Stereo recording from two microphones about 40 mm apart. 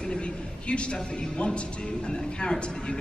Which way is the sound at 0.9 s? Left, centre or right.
Centre.